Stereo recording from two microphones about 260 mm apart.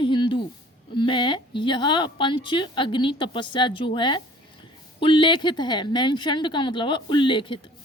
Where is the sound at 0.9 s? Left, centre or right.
Centre.